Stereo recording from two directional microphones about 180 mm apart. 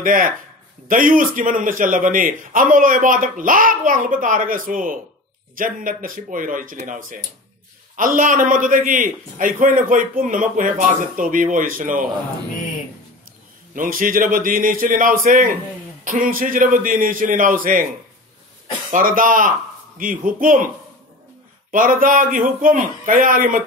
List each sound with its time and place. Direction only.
0.0 s a man's voice: 50° right (ahead or behind)
13.7 s a man's voice: 50° right (ahead or behind)
18.9 s a man's voice: 50° right (ahead or behind)
21.6 s a man's voice: 50° right (ahead or behind)